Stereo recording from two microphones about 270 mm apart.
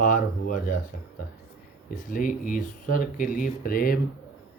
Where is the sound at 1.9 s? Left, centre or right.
Left.